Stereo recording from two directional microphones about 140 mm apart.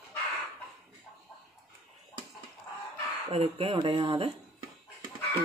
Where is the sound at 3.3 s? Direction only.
45° right (ahead or behind).